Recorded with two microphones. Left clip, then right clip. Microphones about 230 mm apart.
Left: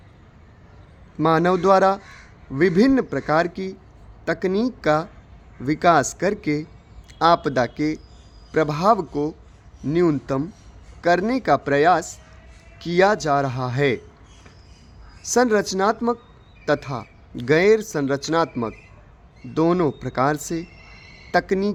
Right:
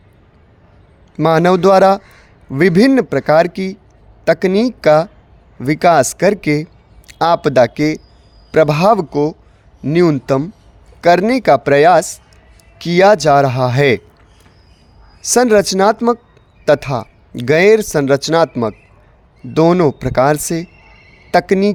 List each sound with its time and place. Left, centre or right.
1.1 s speech: right
15.2 s speech: right